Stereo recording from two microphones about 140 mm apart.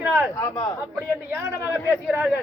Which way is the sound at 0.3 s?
25° left (ahead or behind).